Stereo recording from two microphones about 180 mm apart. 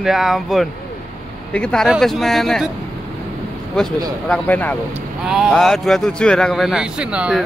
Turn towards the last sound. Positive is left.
turn(degrees=-5)  # may be behind; listen again after turning